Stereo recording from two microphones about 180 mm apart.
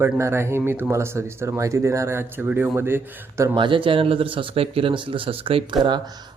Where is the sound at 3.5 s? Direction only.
30° right (ahead or behind).